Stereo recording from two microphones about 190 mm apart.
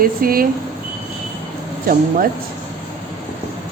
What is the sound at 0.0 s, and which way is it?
Speech, 50° right (ahead or behind).